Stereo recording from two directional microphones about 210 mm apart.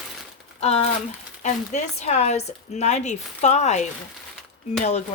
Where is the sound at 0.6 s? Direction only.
30° left (ahead or behind).